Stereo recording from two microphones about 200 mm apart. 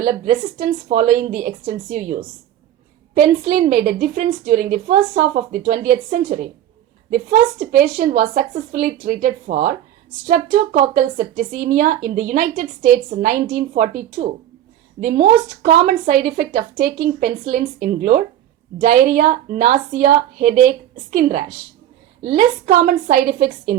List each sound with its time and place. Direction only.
0.0 s speech: 45° right (ahead or behind)